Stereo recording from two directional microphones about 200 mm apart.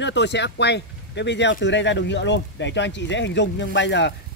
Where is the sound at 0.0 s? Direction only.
60° left (ahead or behind).